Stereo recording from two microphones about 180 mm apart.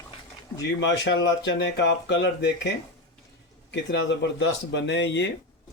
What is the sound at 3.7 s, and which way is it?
Speech, 75° left (ahead or behind).